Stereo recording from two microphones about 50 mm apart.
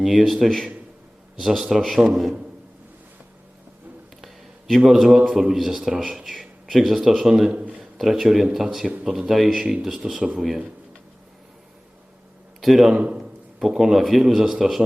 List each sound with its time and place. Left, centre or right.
0.0 s a man's voice: centre
4.9 s a man's voice: centre
12.6 s a man's voice: centre